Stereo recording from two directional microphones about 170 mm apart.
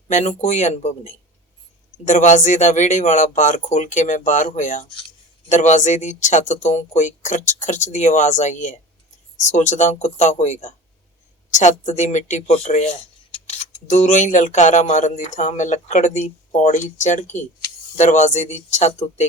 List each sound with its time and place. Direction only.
0.1 s speech: 45° left (ahead or behind)